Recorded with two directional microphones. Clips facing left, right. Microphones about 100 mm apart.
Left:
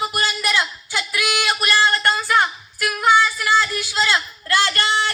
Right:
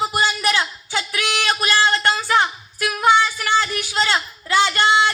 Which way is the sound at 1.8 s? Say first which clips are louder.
Even; 25° right (ahead or behind).